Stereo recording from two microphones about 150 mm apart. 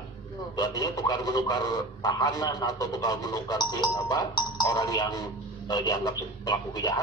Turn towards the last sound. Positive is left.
turn(degrees=25)  # may be behind; listen again after turning